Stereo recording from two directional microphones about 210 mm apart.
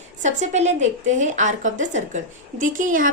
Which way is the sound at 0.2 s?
35° right (ahead or behind).